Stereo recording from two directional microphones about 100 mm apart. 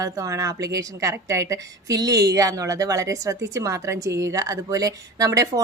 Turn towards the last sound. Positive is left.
turn(degrees=-35)  # may be behind; listen again after turning